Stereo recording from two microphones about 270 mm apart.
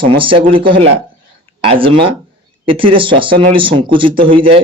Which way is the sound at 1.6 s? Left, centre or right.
Centre.